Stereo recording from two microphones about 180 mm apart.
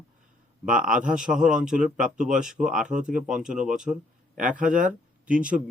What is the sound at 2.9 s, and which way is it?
Speech, 45° right (ahead or behind).